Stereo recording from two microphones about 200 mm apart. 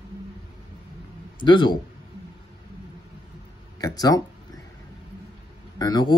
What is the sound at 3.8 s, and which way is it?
Speech, 20° left (ahead or behind).